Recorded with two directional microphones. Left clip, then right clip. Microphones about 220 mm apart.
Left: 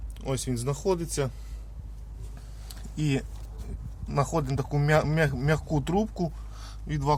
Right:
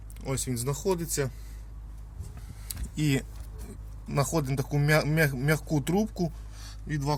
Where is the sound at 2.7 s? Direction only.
15° right (ahead or behind).